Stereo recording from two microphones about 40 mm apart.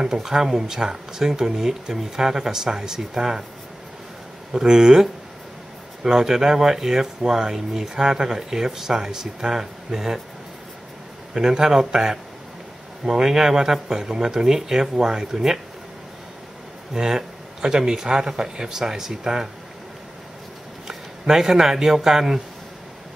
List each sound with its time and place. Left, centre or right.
0.0 s speech: centre
4.5 s speech: centre
6.0 s speech: centre
11.3 s speech: centre
16.9 s speech: centre
20.8 s speech: centre